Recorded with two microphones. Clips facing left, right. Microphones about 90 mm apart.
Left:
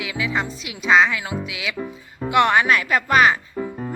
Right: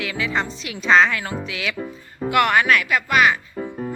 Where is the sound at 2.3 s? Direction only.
20° left (ahead or behind).